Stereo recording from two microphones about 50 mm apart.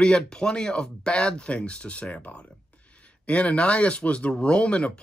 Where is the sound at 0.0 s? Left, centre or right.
Centre.